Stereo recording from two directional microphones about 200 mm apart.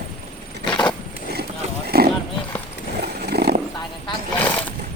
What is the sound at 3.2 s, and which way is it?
Horse, 55° right (ahead or behind).